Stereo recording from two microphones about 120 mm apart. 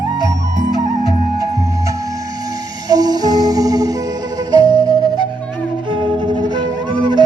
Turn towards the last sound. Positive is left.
turn(degrees=-40)  # may be behind; listen again after turning